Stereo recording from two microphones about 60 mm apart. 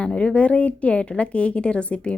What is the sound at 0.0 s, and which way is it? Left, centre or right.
A woman's voice, centre.